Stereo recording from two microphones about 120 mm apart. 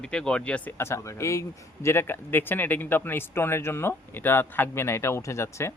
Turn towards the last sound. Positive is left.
turn(degrees=20)  # may be behind; listen again after turning